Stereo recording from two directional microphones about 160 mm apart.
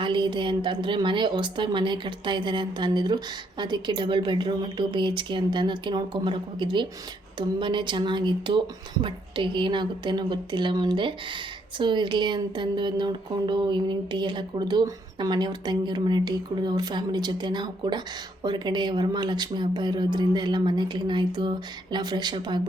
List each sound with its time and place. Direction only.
0.0 s speech: 30° right (ahead or behind)